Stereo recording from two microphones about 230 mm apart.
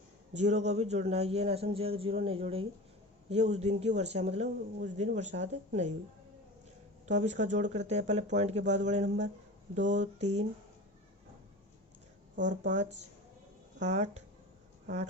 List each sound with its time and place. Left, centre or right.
0.3 s speech: right
7.0 s speech: right
12.5 s speech: right